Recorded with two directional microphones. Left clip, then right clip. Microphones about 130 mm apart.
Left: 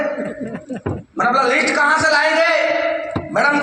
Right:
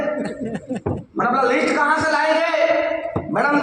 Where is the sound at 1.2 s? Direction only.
20° left (ahead or behind).